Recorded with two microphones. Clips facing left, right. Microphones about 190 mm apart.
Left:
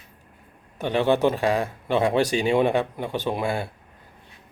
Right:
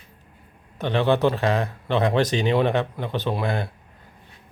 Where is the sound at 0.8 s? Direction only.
10° left (ahead or behind).